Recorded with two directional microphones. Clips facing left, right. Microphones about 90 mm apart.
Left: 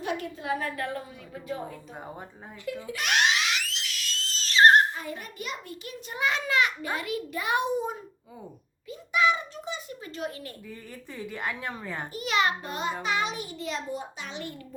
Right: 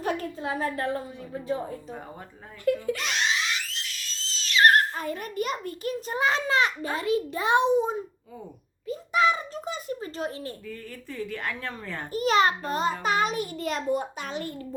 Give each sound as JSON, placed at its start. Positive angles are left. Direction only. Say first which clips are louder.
{"t": 0.0, "sound": "a woman's voice", "louder": "right 3 dB", "side_deg": -40}
{"t": 2.9, "sound": "screaming", "louder": "left 2 dB", "side_deg": 60}
{"t": 4.9, "sound": "a woman's voice", "louder": "right 7 dB", "side_deg": -50}
{"t": 8.9, "sound": "a woman's voice", "louder": "right 2 dB", "side_deg": -40}
{"t": 10.7, "sound": "a woman's voice", "louder": "right 3 dB", "side_deg": 15}
{"t": 12.1, "sound": "a child's voice", "louder": "right 5 dB", "side_deg": -40}